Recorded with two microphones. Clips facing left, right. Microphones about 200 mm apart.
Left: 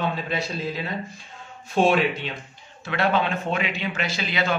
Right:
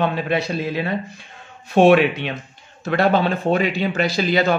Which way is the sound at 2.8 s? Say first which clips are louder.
Right 6 dB; 40° right (ahead or behind).